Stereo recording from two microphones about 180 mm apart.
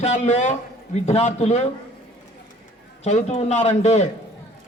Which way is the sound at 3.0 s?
40° left (ahead or behind).